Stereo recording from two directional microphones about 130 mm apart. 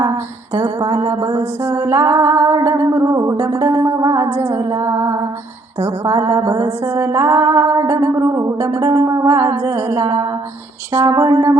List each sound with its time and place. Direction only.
0.0 s speech: 20° right (ahead or behind)
1.4 s music: 20° right (ahead or behind)